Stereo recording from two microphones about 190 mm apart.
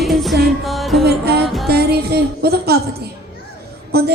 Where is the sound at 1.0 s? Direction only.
55° right (ahead or behind).